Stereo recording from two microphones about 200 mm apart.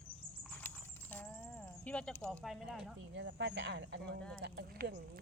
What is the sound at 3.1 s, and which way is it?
Speech, 60° right (ahead or behind).